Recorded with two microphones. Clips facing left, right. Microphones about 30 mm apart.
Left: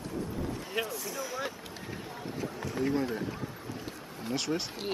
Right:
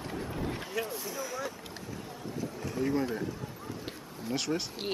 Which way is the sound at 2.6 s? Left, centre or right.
Centre.